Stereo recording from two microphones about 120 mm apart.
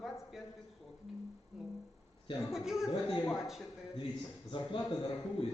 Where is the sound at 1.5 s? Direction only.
5° right (ahead or behind).